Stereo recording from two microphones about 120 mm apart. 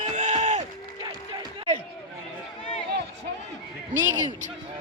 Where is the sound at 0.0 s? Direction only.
85° right.